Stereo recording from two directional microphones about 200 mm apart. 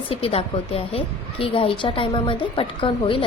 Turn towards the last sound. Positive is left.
turn(degrees=25)  # may be behind; listen again after turning